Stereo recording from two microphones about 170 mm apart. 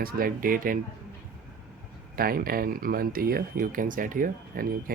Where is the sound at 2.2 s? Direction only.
60° right (ahead or behind).